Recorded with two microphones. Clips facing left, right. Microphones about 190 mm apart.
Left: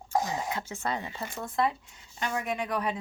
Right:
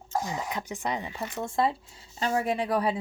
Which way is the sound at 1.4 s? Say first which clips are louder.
Right 1 dB; 25° right (ahead or behind).